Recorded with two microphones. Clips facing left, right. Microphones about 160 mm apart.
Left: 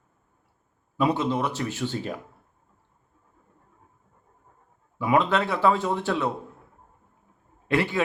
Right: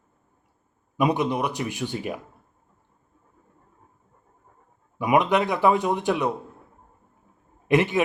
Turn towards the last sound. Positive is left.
turn(degrees=-20)  # may be behind; listen again after turning